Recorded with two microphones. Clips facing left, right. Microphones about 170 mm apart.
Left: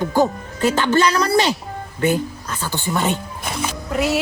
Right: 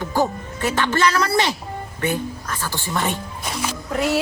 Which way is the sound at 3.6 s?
5° left (ahead or behind).